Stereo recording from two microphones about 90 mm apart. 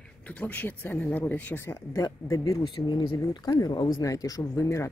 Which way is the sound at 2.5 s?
65° left (ahead or behind).